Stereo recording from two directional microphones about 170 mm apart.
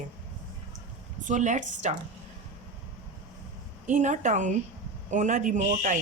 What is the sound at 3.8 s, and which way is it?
Speech, 45° right (ahead or behind).